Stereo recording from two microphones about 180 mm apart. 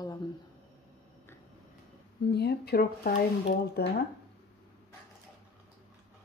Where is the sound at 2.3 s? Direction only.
65° left (ahead or behind).